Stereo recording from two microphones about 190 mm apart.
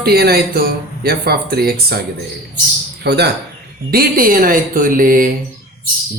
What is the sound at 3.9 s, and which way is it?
Speech, 50° right (ahead or behind).